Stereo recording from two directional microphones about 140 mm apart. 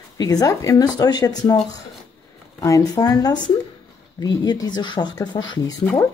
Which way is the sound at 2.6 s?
25° left (ahead or behind).